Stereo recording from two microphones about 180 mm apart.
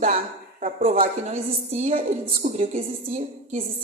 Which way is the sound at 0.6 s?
30° right (ahead or behind).